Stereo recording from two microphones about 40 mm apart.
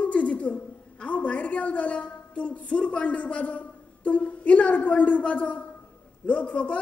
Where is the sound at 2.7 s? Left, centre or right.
Left.